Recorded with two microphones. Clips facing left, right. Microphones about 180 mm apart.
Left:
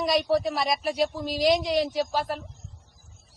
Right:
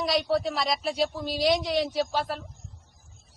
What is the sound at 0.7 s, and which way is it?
Speech, 15° left (ahead or behind).